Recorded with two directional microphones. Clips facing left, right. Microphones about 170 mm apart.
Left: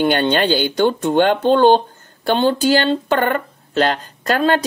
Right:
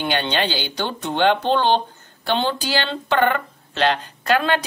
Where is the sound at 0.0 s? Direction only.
50° left (ahead or behind).